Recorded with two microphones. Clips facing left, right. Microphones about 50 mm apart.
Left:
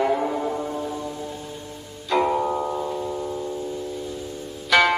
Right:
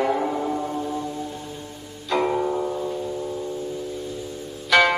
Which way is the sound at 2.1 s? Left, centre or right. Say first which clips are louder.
Left 1 dB; centre.